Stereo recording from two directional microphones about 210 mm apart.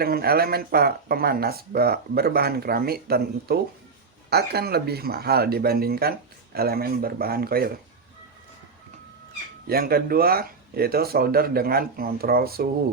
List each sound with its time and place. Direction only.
0.0 s speech: 45° right (ahead or behind)
9.6 s speech: 45° right (ahead or behind)